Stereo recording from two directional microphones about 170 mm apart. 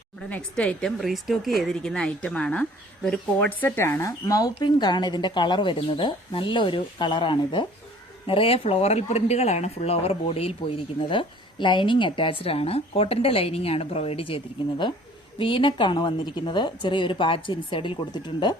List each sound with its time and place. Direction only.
0.2 s a woman's voice: 5° left (ahead or behind); by 18.5 s 25° left (ahead or behind)